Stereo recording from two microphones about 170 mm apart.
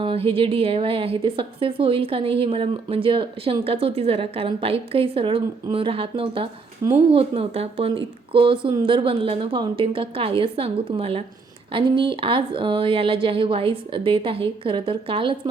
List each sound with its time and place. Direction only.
0.0 s a woman's voice: 30° right (ahead or behind)